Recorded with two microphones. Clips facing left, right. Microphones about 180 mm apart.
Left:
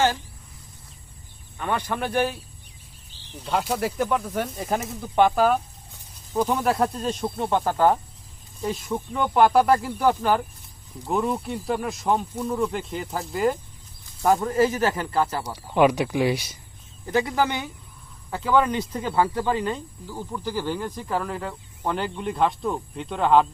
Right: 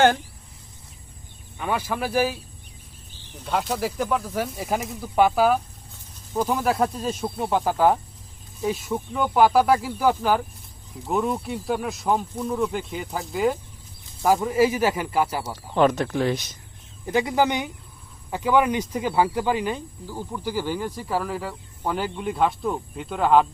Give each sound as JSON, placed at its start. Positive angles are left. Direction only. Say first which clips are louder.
{"t": 1.5, "sound": "speech", "louder": "even", "side_deg": -5}
{"t": 3.6, "sound": "a man's voice", "louder": "left 2 dB", "side_deg": 5}
{"t": 15.7, "sound": "speech", "louder": "left 1 dB", "side_deg": 10}
{"t": 17.1, "sound": "a man's voice", "louder": "right 2 dB", "side_deg": -15}